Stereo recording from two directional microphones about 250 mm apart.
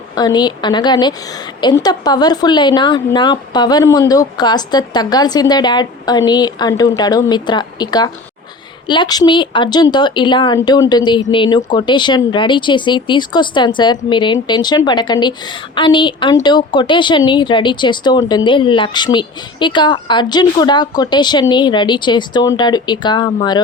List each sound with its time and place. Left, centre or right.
0.2 s speech: centre